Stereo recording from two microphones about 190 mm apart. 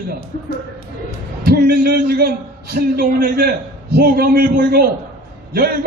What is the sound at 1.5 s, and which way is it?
A man's voice, 55° right (ahead or behind).